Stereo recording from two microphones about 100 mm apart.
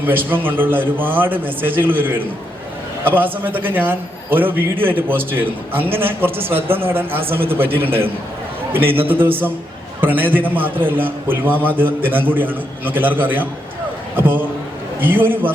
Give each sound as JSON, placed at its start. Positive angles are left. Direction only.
{"t": 0.0, "sound": "a man's voice", "side_deg": -20}